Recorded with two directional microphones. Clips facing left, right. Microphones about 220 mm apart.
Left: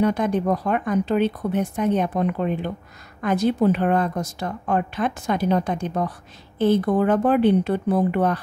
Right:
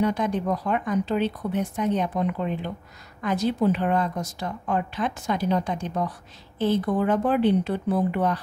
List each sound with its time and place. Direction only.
0.0 s speech: 55° left (ahead or behind)